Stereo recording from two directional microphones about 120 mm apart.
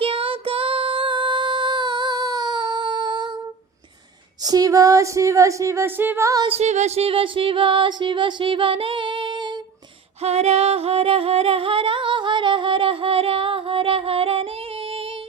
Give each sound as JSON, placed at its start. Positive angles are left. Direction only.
{"t": 0.0, "sound": "female singing", "side_deg": -50}
{"t": 4.4, "sound": "speech", "side_deg": -30}
{"t": 6.6, "sound": "music", "side_deg": -70}
{"t": 10.2, "sound": "singing", "side_deg": -60}